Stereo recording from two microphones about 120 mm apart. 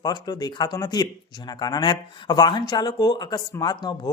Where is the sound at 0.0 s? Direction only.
35° left (ahead or behind).